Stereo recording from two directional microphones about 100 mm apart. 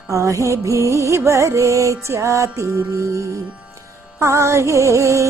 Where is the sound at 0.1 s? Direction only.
30° right (ahead or behind).